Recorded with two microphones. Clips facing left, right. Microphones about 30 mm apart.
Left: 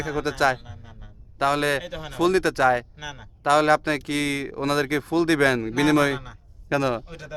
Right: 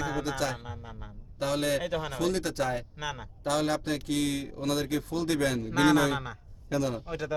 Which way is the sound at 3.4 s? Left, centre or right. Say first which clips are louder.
Left 10 dB; left.